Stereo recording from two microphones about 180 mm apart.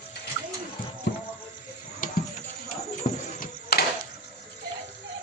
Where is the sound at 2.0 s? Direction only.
50° left (ahead or behind).